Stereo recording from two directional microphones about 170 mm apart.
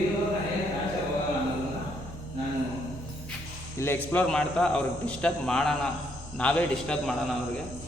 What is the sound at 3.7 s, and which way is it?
A man's voice, 15° left (ahead or behind).